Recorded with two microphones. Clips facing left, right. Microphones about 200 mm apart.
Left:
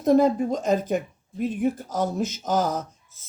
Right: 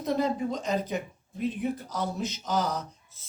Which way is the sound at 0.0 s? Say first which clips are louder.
Left 8 dB; 50° left (ahead or behind).